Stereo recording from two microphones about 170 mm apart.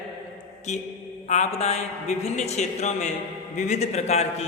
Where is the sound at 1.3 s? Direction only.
45° left (ahead or behind).